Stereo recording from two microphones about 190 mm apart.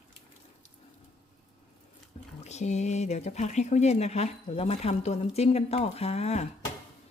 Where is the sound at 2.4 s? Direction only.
35° left (ahead or behind).